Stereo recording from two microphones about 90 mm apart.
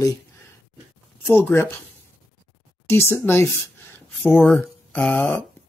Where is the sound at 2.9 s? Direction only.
25° left (ahead or behind).